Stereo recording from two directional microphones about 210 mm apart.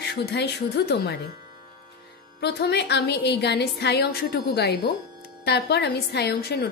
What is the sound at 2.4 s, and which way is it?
A woman's voice, 50° left (ahead or behind).